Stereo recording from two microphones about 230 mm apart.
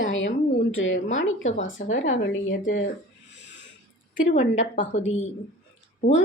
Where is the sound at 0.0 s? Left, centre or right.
Left.